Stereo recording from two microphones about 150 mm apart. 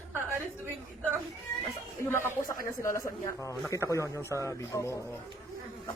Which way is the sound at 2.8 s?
20° left (ahead or behind).